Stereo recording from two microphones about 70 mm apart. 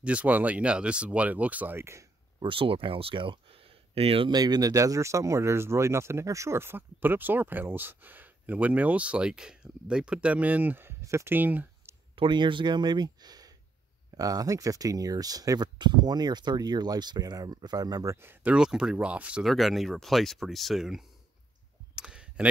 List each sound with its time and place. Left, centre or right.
0.0 s speech: centre
1.8 s speech: right
3.1 s speech: right
4.3 s speech: right
11.2 s speech: right
12.3 s speech: right
18.1 s speech: right
18.6 s speech: centre
19.4 s speech: centre
21.9 s clicking: centre